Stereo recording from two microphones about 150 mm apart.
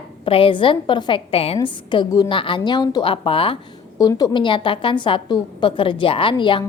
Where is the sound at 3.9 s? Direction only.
25° left (ahead or behind).